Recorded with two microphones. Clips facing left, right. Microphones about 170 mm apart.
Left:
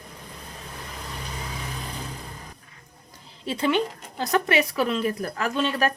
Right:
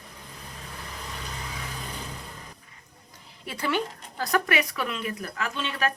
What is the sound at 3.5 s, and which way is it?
Speech, 20° left (ahead or behind).